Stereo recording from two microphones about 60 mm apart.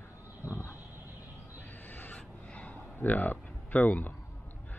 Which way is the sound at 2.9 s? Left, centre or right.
Left.